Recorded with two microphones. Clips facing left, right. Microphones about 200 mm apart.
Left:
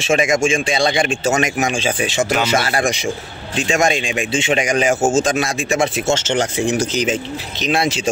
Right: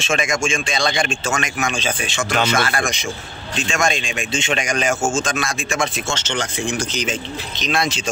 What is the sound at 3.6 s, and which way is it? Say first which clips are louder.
Speech: left 4 dB; 20° left (ahead or behind).